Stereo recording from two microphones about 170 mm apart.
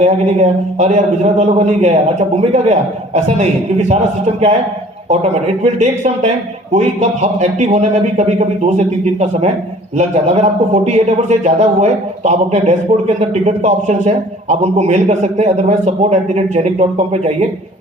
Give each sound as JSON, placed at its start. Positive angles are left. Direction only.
{"t": 0.0, "sound": "a man's voice", "side_deg": -40}
{"t": 5.0, "sound": "a man's voice", "side_deg": -40}
{"t": 10.0, "sound": "a man's voice", "side_deg": -40}